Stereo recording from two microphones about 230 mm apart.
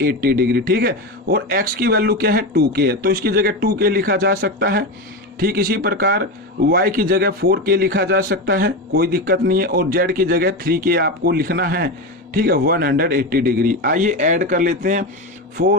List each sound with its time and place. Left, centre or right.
0.0 s a man's voice: right